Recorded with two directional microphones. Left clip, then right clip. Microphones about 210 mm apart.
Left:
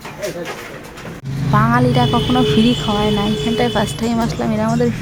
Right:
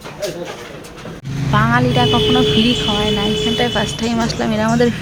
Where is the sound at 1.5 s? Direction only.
10° left (ahead or behind).